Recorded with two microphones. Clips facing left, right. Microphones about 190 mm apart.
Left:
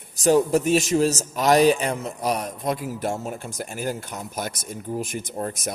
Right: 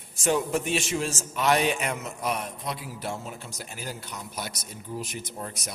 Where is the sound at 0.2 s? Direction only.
40° left (ahead or behind).